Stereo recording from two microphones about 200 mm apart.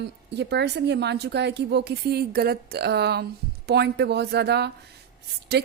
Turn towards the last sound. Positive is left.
turn(degrees=-55)  # may be behind; listen again after turning